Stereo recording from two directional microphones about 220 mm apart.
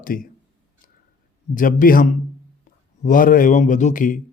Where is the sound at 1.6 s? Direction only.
40° left (ahead or behind).